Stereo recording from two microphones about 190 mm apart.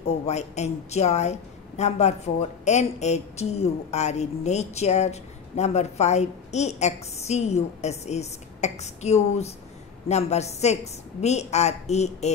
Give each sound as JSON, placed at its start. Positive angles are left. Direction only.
{"t": 0.3, "sound": "a woman's voice", "side_deg": 35}